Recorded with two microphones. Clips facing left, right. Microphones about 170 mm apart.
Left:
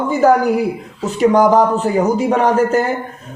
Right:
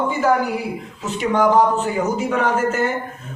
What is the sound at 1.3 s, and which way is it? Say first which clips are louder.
A man's voice: left 1 dB; 40° left (ahead or behind).